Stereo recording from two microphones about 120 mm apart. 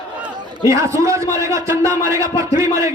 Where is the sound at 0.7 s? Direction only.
25° right (ahead or behind).